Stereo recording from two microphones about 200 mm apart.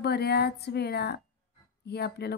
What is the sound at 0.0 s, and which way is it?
Speech, 55° left (ahead or behind).